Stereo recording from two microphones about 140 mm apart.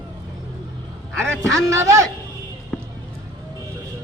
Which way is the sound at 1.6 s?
20° right (ahead or behind).